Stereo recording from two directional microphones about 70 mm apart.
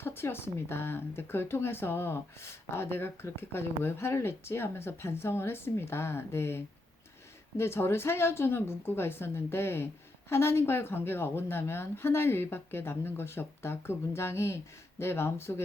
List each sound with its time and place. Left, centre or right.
0.0 s speech: left
7.6 s speech: left